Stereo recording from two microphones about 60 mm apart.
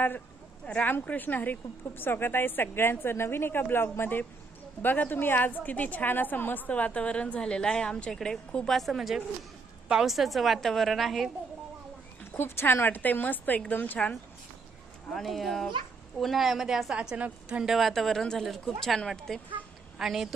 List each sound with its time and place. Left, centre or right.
0.6 s speech: centre
0.9 s a woman's voice: left; by 11.3 s centre
12.4 s a woman's voice: left
15.1 s a woman's voice: centre
17.0 s a woman's voice: right
17.6 s a woman's voice: centre
20.0 s a woman's voice: centre